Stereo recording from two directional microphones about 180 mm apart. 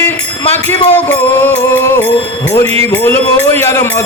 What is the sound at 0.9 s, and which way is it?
Music, 10° left (ahead or behind).